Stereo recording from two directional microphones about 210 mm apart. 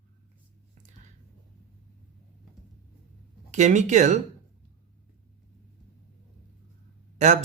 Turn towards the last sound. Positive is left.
turn(degrees=-35)  # may be behind; listen again after turning